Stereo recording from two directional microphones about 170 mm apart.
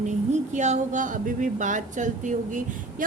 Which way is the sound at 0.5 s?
45° right (ahead or behind).